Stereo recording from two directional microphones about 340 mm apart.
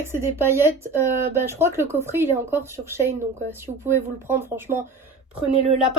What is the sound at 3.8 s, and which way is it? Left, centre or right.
Speech, centre.